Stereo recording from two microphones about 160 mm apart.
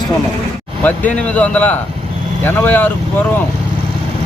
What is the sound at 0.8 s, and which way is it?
Speech, 10° left (ahead or behind).